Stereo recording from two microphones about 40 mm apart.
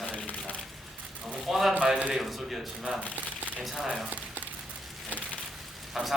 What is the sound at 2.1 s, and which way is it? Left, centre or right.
Speech, centre.